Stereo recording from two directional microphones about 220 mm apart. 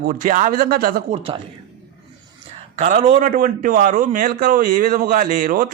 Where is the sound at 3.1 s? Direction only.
40° right (ahead or behind).